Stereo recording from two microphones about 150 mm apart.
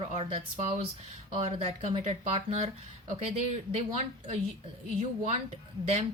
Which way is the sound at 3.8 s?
45° right (ahead or behind).